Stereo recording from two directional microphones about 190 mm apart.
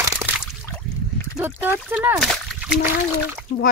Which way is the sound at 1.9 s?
10° right (ahead or behind).